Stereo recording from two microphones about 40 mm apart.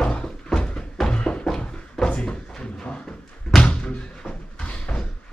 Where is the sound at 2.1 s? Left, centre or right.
Left.